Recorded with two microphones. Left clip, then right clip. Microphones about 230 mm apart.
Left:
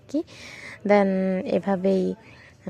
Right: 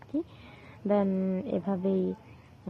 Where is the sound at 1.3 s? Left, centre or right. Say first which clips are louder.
Left 8 dB; left.